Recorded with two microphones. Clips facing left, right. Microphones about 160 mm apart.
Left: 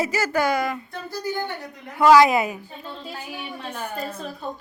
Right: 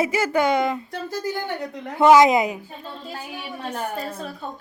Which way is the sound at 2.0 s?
20° right (ahead or behind).